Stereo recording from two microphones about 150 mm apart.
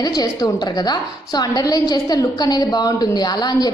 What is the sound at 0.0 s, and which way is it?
A woman's voice, 25° left (ahead or behind).